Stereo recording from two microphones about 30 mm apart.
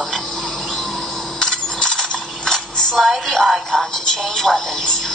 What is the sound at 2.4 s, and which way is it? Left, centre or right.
Cutlery, centre.